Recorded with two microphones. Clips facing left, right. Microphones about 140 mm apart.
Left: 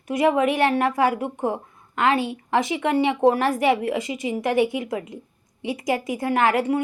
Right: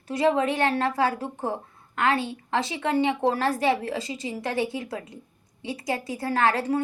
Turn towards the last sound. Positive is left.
turn(degrees=20)  # may be behind; listen again after turning